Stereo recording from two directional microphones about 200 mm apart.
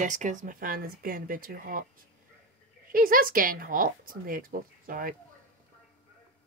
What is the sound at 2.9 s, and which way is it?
A woman's voice, 45° right (ahead or behind).